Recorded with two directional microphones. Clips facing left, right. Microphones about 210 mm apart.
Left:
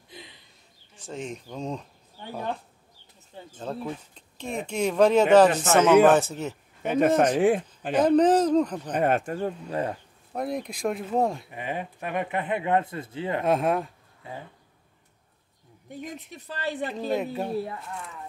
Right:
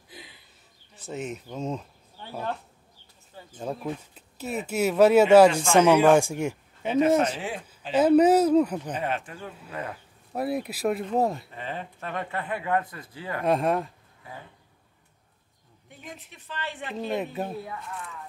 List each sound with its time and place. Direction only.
0.9 s speech: 5° right (ahead or behind)
3.5 s speech: 10° right (ahead or behind)
7.3 s speech: 55° left (ahead or behind)
7.9 s speech: 5° right (ahead or behind)
8.9 s speech: 50° left (ahead or behind); by 9.9 s 35° left (ahead or behind)
10.3 s speech: 5° right (ahead or behind)
11.5 s speech: 15° left (ahead or behind)
13.4 s speech: centre (ahead or behind)
14.2 s speech: 25° left (ahead or behind)
16.0 s speech: 40° left (ahead or behind)
17.1 s speech: centre (ahead or behind)